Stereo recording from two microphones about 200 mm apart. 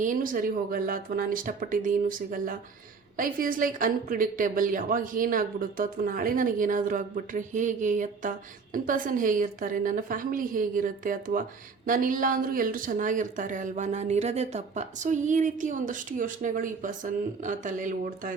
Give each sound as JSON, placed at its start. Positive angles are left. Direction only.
{"t": 0.0, "sound": "a woman's voice", "side_deg": -40}